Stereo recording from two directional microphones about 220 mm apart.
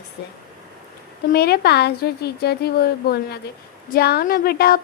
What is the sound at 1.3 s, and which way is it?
A woman's voice, 45° left (ahead or behind).